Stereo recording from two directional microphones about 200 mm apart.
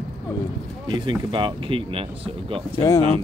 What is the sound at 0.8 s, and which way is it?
Speech, 25° right (ahead or behind).